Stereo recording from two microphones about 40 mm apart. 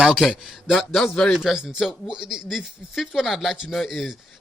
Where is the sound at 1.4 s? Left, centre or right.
Centre.